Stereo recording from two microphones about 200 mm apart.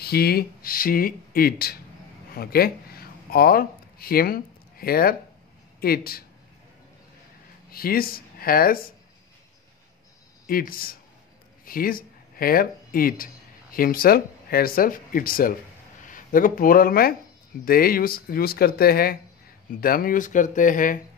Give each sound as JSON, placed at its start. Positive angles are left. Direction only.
{"t": 0.0, "sound": "speech", "side_deg": 50}
{"t": 7.7, "sound": "speech", "side_deg": 50}
{"t": 10.4, "sound": "speech", "side_deg": 45}